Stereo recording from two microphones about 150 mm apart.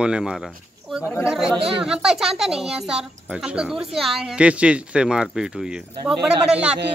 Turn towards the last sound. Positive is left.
turn(degrees=-5)  # may be behind; listen again after turning